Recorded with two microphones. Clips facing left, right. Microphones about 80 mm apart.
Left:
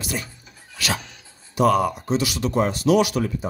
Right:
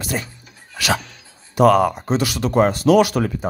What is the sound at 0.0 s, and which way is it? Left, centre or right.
Speech, right.